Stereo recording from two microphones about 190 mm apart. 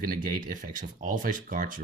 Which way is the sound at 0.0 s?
50° right (ahead or behind).